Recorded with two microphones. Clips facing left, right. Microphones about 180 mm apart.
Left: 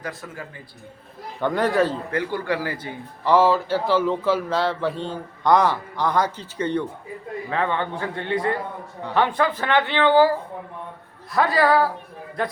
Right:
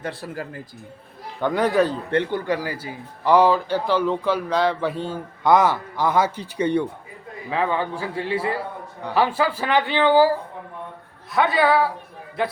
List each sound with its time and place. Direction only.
0.0 s a man's voice: 30° right (ahead or behind)
1.4 s a man's voice: centre (ahead or behind)
2.0 s a man's voice: 25° right (ahead or behind)
11.3 s a man's voice: centre (ahead or behind)